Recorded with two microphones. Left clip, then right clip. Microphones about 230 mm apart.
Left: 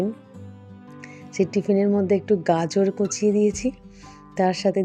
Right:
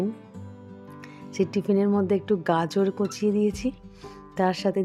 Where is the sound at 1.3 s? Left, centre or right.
Centre.